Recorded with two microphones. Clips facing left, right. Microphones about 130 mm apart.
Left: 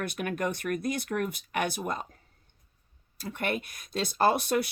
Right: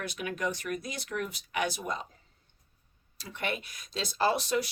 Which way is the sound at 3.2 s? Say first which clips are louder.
Left 4 dB; 50° left (ahead or behind).